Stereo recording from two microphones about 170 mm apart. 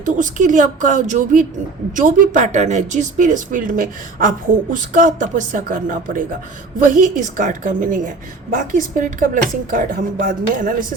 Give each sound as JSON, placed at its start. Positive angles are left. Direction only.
{"t": 0.0, "sound": "speech", "side_deg": -50}